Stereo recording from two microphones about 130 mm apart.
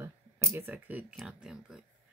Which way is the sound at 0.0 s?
20° right (ahead or behind).